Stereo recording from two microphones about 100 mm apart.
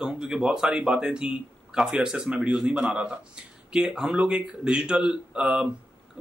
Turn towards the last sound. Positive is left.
turn(degrees=-10)  # may be behind; listen again after turning